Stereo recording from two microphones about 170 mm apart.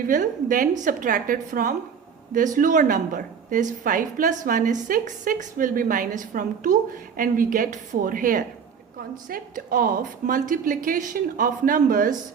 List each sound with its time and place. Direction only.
0.0 s a woman's voice: 50° right (ahead or behind)